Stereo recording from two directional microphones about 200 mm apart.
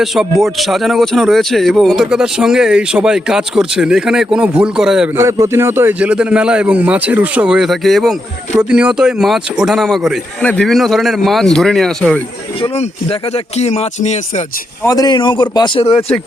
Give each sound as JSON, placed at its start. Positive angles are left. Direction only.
{"t": 0.0, "sound": "speech", "side_deg": 0}
{"t": 5.1, "sound": "a man's voice", "side_deg": -15}
{"t": 12.7, "sound": "speech", "side_deg": 30}
{"t": 14.8, "sound": "a man's voice", "side_deg": 20}